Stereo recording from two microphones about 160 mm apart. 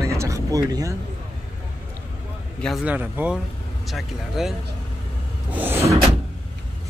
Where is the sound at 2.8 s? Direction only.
10° right (ahead or behind).